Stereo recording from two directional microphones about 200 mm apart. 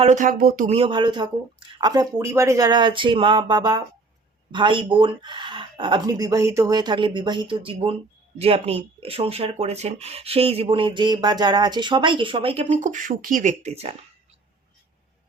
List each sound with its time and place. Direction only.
0.0 s speech: 40° right (ahead or behind)
0.8 s speech: 25° right (ahead or behind)